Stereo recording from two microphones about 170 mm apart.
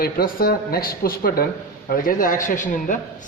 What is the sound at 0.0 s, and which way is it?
Speech, 60° left (ahead or behind).